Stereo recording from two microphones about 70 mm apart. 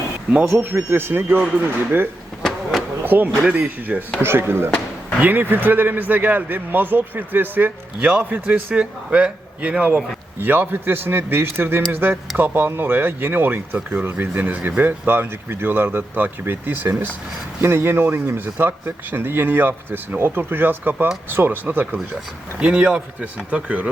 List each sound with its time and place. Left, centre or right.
0.4 s speech: right
4.2 s speech: right
8.7 s a man's voice: centre
22.6 s a man's voice: centre